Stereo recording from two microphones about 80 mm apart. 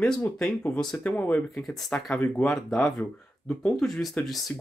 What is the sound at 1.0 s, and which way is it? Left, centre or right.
Speech, left.